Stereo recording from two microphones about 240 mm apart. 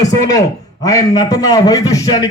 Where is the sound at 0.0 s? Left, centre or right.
Centre.